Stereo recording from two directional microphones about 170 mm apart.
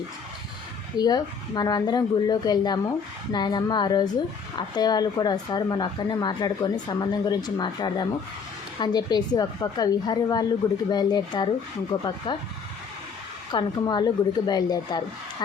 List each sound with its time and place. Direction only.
0.9 s speech: 25° left (ahead or behind)
13.5 s speech: 25° left (ahead or behind)